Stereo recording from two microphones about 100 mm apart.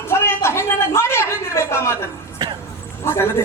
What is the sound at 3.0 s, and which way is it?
Speech, 25° left (ahead or behind).